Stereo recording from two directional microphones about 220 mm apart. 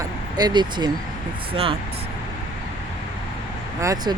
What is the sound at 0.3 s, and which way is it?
Speech, 20° right (ahead or behind).